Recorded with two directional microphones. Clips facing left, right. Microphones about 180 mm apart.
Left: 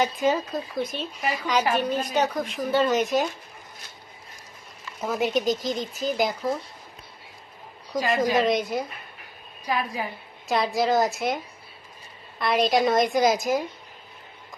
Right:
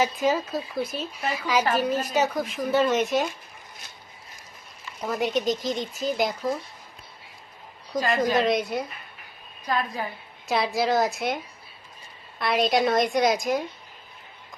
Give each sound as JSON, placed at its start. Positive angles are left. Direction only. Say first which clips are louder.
{"t": 0.0, "sound": "speech", "louder": "even", "side_deg": 0}
{"t": 5.0, "sound": "speech", "louder": "left 1 dB", "side_deg": 0}
{"t": 7.9, "sound": "a woman's voice", "louder": "even", "side_deg": 0}
{"t": 10.4, "sound": "speech", "louder": "left 1 dB", "side_deg": 0}
{"t": 12.4, "sound": "speech", "louder": "left 1 dB", "side_deg": 0}